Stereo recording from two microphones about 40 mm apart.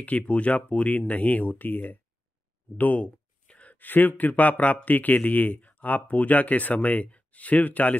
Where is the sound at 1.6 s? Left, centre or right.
Left.